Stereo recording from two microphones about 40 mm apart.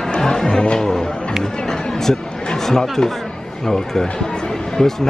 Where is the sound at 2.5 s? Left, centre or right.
Centre.